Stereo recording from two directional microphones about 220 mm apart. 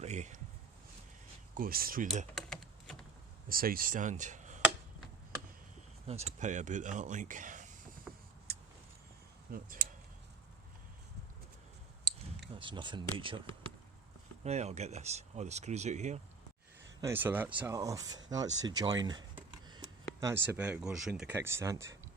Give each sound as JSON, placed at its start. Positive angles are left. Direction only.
{"t": 0.0, "sound": "speech", "side_deg": -30}
{"t": 1.5, "sound": "speech", "side_deg": -40}
{"t": 2.3, "sound": "typing", "side_deg": 0}
{"t": 3.5, "sound": "speech", "side_deg": -40}
{"t": 6.1, "sound": "speech", "side_deg": -30}
{"t": 8.1, "sound": "power windows", "side_deg": -5}
{"t": 8.5, "sound": "vehicle", "side_deg": -45}
{"t": 9.5, "sound": "speech", "side_deg": -40}
{"t": 12.5, "sound": "speech", "side_deg": -20}
{"t": 17.0, "sound": "speech", "side_deg": -10}
{"t": 20.1, "sound": "speech", "side_deg": -10}